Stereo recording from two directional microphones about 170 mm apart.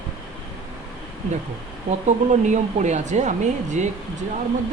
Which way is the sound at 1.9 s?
45° right (ahead or behind).